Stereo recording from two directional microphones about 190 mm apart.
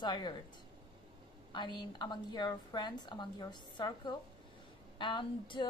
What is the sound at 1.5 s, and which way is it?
A woman's voice, 25° left (ahead or behind).